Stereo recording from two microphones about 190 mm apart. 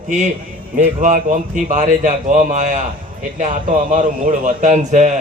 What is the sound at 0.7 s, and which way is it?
A man's voice, 40° right (ahead or behind).